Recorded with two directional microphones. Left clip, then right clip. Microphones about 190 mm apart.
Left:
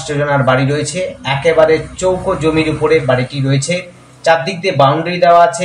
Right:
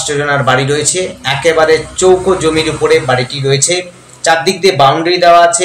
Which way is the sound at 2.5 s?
20° right (ahead or behind).